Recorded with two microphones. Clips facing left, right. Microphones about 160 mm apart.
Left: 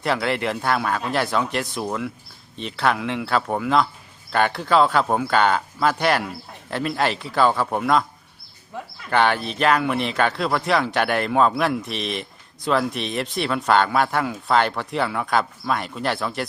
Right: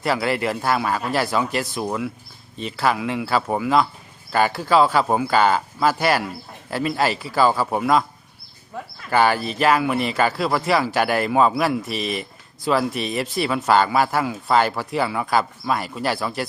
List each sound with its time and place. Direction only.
0.0 s speech: 5° right (ahead or behind)
9.0 s speech: 5° right (ahead or behind)